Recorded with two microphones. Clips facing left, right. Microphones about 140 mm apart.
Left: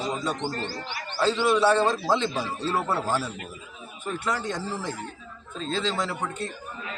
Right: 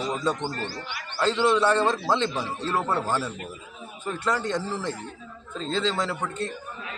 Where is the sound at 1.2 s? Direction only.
10° left (ahead or behind).